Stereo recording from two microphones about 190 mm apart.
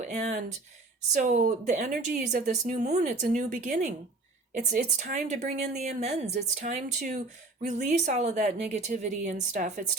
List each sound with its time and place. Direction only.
0.0 s a woman's voice: 40° right (ahead or behind)